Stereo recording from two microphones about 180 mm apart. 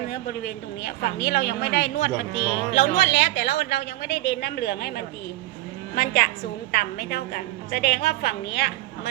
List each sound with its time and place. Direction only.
0.1 s a woman's voice: 60° left (ahead or behind)